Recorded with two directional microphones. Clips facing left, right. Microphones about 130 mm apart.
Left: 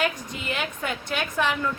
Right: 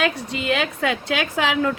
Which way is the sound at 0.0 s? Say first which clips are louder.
Right 5 dB; 75° right (ahead or behind).